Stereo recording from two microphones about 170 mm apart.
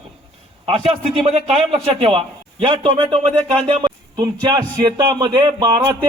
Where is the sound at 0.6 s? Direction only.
35° right (ahead or behind).